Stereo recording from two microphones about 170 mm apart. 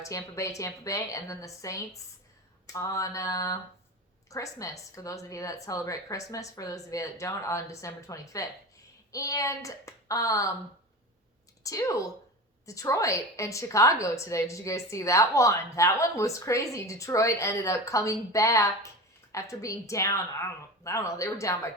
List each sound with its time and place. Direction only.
0.0 s a woman's voice: 20° left (ahead or behind)
11.6 s a woman's voice: 20° left (ahead or behind)